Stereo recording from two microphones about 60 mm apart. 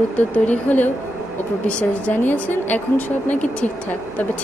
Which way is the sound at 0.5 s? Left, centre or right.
Left.